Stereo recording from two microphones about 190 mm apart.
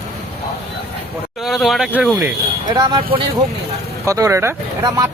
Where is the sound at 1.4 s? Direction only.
Centre (ahead or behind).